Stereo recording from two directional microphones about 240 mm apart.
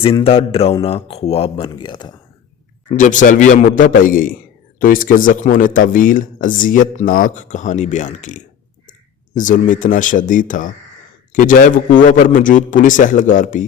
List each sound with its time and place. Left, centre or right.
0.0 s speech: left
2.9 s speech: left